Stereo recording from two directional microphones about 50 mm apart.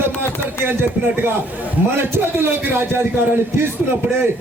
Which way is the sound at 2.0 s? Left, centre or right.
Right.